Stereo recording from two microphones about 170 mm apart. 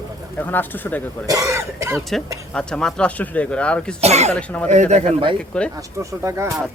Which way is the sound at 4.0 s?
40° right (ahead or behind).